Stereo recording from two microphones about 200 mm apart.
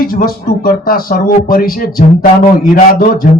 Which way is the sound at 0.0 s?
45° left (ahead or behind).